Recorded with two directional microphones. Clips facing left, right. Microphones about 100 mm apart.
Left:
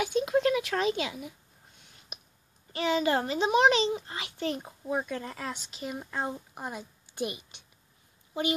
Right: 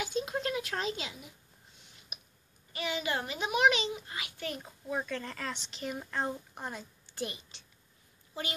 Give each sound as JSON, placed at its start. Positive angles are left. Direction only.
{"t": 0.0, "sound": "a sound", "side_deg": 70}
{"t": 2.7, "sound": "a child's voice", "side_deg": 35}
{"t": 5.1, "sound": "speech", "side_deg": 10}